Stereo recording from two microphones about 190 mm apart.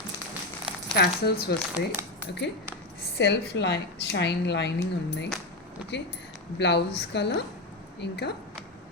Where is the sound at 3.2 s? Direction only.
65° left (ahead or behind).